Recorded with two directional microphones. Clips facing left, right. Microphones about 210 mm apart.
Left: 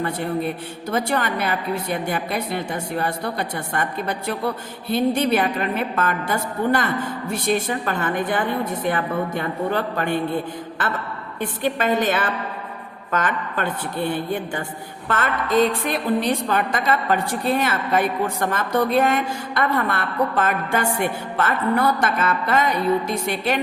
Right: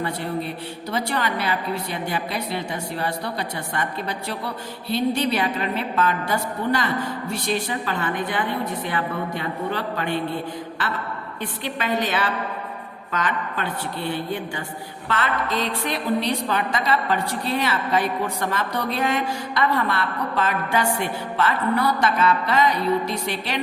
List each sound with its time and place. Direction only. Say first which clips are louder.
0.0 s a woman's voice: left 3 dB; 50° left (ahead or behind)
11.3 s a woman's voice: left 7 dB; 50° left (ahead or behind)